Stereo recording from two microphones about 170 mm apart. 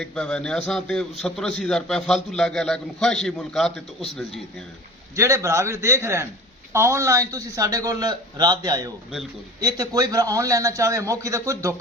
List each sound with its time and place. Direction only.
0.0 s a man's voice: 5° left (ahead or behind)
5.1 s a man's voice: 15° right (ahead or behind)